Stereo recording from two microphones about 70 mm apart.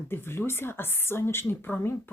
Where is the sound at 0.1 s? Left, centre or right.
Left.